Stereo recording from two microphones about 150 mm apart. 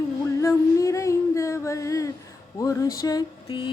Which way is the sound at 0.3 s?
20° left (ahead or behind).